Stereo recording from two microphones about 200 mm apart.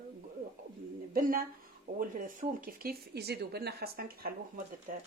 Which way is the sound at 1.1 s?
45° right (ahead or behind).